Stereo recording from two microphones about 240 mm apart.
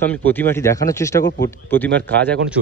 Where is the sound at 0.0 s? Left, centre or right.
Centre.